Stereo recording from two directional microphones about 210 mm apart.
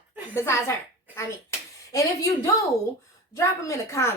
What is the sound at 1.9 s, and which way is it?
A woman's voice, 15° left (ahead or behind).